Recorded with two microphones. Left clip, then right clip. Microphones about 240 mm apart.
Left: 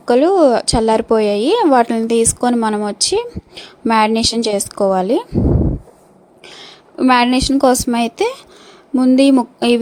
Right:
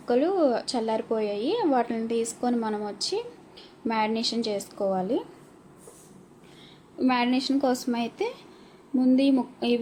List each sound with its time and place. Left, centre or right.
0.0 s a woman's voice: left
6.4 s a woman's voice: left